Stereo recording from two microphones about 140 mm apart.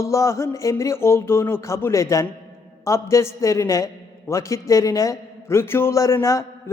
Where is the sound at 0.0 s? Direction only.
20° left (ahead or behind).